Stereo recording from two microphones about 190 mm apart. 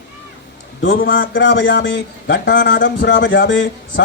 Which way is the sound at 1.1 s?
75° left (ahead or behind).